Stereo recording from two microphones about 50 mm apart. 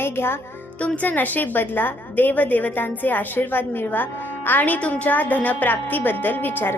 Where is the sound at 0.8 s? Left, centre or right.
Left.